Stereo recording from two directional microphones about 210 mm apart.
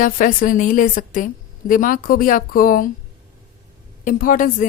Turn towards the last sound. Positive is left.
turn(degrees=40)  # may be behind; listen again after turning